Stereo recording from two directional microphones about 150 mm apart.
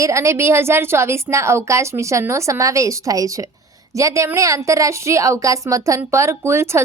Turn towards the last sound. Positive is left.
turn(degrees=-15)  # may be behind; listen again after turning